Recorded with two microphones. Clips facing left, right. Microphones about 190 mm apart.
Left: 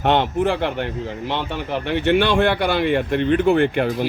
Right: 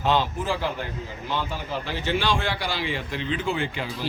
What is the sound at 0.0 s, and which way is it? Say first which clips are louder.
A man's voice: left 6 dB; 65° left (ahead or behind).